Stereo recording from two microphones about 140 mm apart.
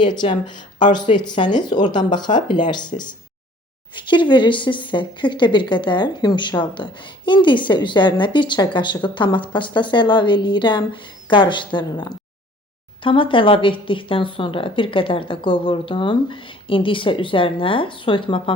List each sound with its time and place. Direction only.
0.0 s speech: 35° left (ahead or behind)